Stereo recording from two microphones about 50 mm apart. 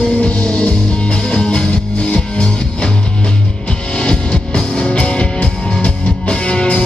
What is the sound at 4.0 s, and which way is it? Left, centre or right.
Music, centre.